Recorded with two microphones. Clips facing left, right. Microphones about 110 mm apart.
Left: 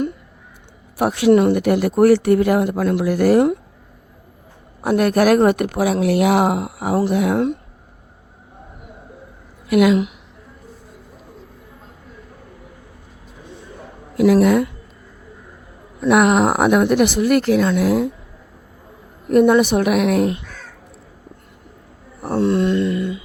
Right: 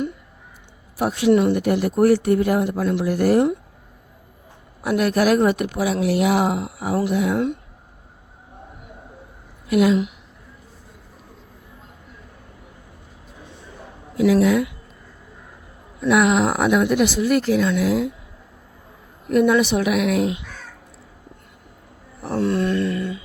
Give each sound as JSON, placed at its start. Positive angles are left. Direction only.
{"t": 0.9, "sound": "speech", "side_deg": 70}
{"t": 1.3, "sound": "speech", "side_deg": 55}
{"t": 2.7, "sound": "speech", "side_deg": 60}
{"t": 4.8, "sound": "speech", "side_deg": 45}
{"t": 9.6, "sound": "a woman's voice", "side_deg": 75}
{"t": 14.2, "sound": "speech", "side_deg": 55}
{"t": 16.0, "sound": "speech", "side_deg": 50}
{"t": 17.7, "sound": "speech", "side_deg": 50}
{"t": 19.3, "sound": "speech", "side_deg": 45}
{"t": 22.3, "sound": "a sound", "side_deg": 25}